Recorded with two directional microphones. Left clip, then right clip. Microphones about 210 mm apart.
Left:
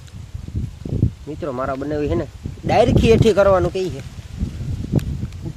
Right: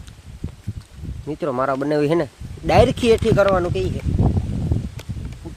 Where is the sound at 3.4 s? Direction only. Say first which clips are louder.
Left 2 dB; 10° left (ahead or behind).